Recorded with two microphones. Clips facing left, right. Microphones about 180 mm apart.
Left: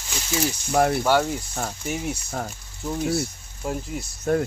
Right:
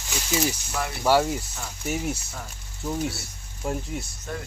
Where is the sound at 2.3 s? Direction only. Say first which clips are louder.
Left 9 dB; 50° left (ahead or behind).